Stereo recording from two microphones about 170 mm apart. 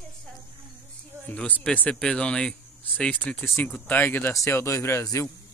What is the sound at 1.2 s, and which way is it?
Speech, 10° left (ahead or behind).